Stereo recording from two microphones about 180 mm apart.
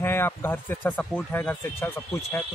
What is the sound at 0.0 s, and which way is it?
Speech, 15° left (ahead or behind).